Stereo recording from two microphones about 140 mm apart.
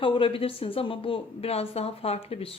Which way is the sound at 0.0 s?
40° left (ahead or behind).